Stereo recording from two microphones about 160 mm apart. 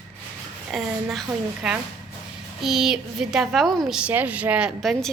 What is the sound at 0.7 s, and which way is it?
A woman's voice, centre (ahead or behind).